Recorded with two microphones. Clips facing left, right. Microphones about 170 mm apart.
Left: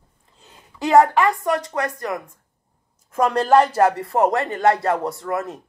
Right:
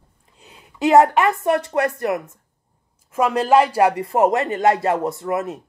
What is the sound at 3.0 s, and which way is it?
A woman's voice, 5° right (ahead or behind).